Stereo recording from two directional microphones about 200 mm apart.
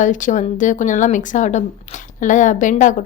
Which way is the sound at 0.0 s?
40° left (ahead or behind).